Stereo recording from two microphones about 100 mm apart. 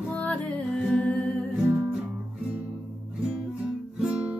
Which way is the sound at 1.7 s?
15° right (ahead or behind).